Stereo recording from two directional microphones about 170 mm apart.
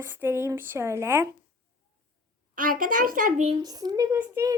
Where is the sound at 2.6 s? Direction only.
55° right (ahead or behind).